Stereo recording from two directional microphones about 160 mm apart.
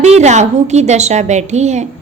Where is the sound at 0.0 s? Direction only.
45° right (ahead or behind).